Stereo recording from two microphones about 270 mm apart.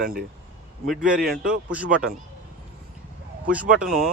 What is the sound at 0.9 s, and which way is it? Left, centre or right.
Speech, centre.